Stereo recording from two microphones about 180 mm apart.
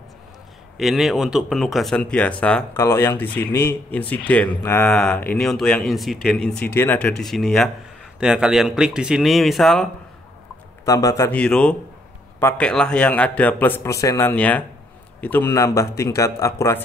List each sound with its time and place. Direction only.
0.7 s speech: centre (ahead or behind)
10.9 s a man's voice: 20° left (ahead or behind)
11.3 s speech: 5° left (ahead or behind)